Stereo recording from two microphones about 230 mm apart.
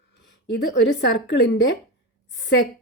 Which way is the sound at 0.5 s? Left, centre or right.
Left.